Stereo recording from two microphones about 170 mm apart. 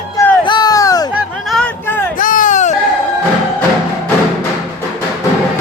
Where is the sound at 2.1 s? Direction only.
50° left (ahead or behind).